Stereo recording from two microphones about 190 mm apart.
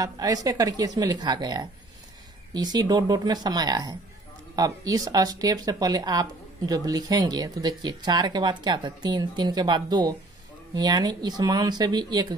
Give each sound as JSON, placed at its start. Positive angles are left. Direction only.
{"t": 0.0, "sound": "speech", "side_deg": -20}